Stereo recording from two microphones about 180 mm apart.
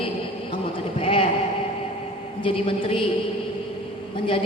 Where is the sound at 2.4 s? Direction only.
30° left (ahead or behind).